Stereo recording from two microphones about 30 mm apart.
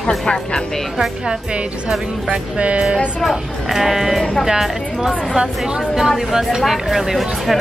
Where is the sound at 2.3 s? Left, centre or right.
Right.